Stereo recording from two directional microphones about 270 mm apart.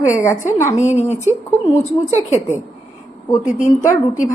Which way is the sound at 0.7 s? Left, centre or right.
Left.